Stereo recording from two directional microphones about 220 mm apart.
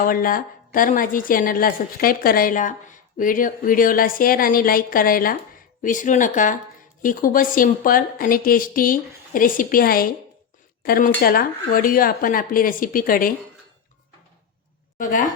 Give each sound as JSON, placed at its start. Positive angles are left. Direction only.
{"t": 0.0, "sound": "a woman's voice", "side_deg": 40}
{"t": 14.9, "sound": "a woman's voice", "side_deg": 40}